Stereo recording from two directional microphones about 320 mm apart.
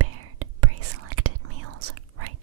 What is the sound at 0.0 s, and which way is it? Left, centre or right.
Whispering, right.